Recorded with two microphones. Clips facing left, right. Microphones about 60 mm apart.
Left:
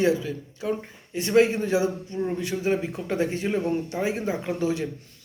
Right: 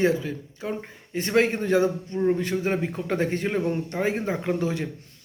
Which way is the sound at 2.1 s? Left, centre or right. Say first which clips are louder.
Right 4 dB; right.